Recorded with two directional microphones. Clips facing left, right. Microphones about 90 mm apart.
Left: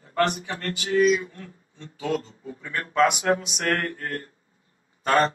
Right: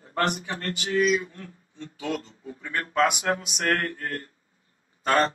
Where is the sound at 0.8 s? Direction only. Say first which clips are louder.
Left 4 dB; 35° left (ahead or behind).